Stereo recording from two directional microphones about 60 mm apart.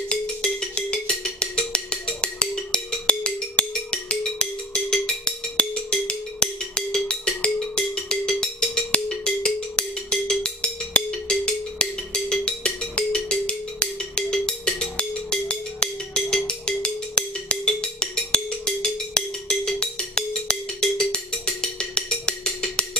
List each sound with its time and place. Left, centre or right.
0.1 s music: centre